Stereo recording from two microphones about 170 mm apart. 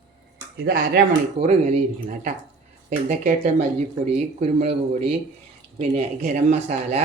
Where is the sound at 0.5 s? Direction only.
70° right (ahead or behind).